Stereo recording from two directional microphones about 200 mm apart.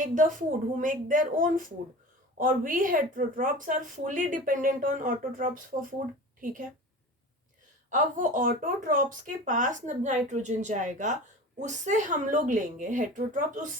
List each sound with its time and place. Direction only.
0.0 s a woman's voice: 40° right (ahead or behind)
7.9 s speech: 40° right (ahead or behind)